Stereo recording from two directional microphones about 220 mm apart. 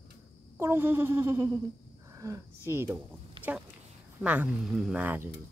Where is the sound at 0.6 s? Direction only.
10° right (ahead or behind).